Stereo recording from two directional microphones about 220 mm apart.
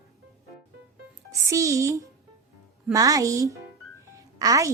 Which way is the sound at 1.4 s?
15° right (ahead or behind).